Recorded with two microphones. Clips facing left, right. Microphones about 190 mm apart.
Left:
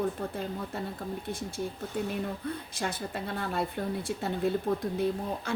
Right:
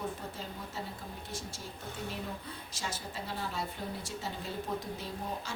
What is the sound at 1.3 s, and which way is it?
Speech, 55° left (ahead or behind).